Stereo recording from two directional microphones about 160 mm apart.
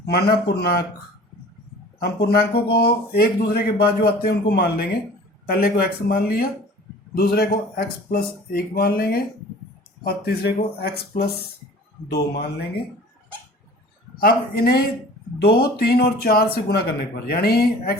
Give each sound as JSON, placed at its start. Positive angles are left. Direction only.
{"t": 0.0, "sound": "speech", "side_deg": 80}
{"t": 2.0, "sound": "speech", "side_deg": 75}
{"t": 12.0, "sound": "speech", "side_deg": 90}
{"t": 14.2, "sound": "speech", "side_deg": 70}